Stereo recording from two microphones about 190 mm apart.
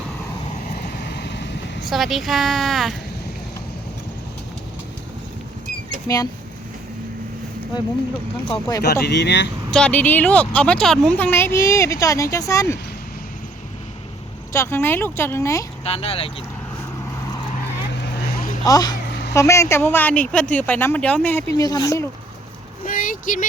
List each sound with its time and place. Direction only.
1.0 s vehicle: 60° left (ahead or behind)
1.8 s speech: centre (ahead or behind)
8.4 s speech: 25° left (ahead or behind)
8.8 s speech: 60° left (ahead or behind)
9.7 s speech: 5° left (ahead or behind)
14.5 s speech: 15° left (ahead or behind)
15.8 s speech: 30° left (ahead or behind)
18.0 s vehicle: 50° left (ahead or behind)
18.6 s speech: 20° left (ahead or behind)
22.8 s vehicle: 45° left (ahead or behind)